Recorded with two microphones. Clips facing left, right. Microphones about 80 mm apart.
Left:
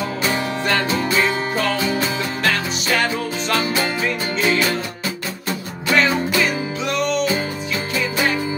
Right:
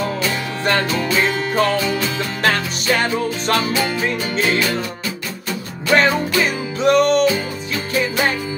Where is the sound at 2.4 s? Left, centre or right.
Right.